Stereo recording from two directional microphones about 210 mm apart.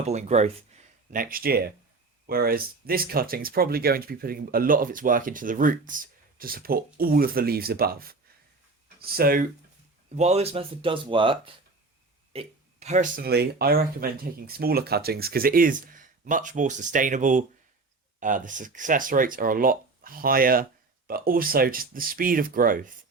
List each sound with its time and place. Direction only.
0.0 s speech: 30° right (ahead or behind)
10.2 s speech: 30° right (ahead or behind)